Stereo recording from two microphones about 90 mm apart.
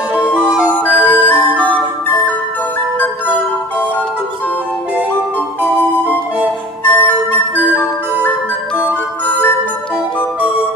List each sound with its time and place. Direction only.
0.9 s music: 20° left (ahead or behind)
5.6 s music: 20° right (ahead or behind)
6.9 s music: 20° left (ahead or behind)